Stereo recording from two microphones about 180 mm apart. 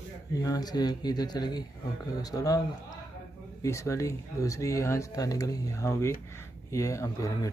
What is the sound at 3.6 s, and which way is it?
Speech, 15° left (ahead or behind).